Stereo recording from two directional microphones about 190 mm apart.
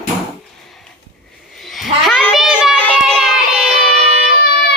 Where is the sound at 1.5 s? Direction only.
Centre (ahead or behind).